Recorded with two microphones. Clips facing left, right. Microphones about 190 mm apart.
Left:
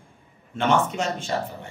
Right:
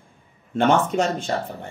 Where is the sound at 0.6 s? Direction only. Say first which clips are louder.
Right 4 dB; 40° right (ahead or behind).